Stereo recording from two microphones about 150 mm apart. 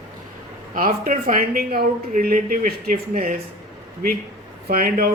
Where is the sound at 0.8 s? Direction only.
70° right (ahead or behind).